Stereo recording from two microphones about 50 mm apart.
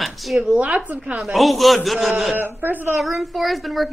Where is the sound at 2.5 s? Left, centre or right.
Right.